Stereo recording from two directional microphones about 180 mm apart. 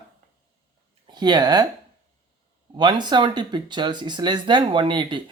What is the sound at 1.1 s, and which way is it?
Speech, 25° right (ahead or behind).